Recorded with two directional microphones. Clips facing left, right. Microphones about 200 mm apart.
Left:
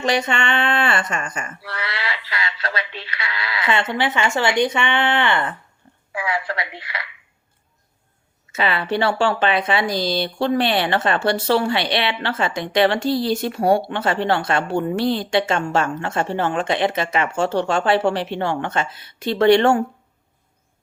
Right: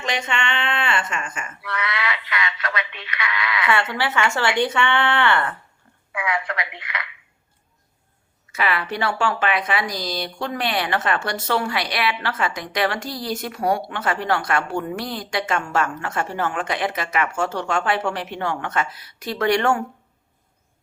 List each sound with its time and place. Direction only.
0.0 s speech: 35° left (ahead or behind)
3.7 s speech: 20° left (ahead or behind)
6.1 s telephone: 30° left (ahead or behind)
8.5 s speech: 25° left (ahead or behind)